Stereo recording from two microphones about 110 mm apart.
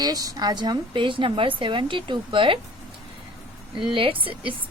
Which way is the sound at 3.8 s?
50° right (ahead or behind).